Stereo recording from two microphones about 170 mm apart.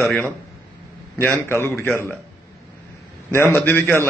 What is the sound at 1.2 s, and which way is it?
Speech, 15° left (ahead or behind).